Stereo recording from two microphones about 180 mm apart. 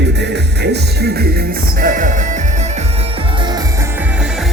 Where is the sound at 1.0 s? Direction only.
65° right (ahead or behind).